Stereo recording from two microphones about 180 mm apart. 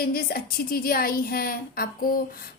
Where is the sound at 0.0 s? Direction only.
55° left (ahead or behind).